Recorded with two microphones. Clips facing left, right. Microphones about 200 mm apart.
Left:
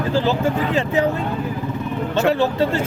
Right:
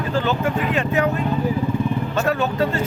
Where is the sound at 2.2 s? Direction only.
30° left (ahead or behind).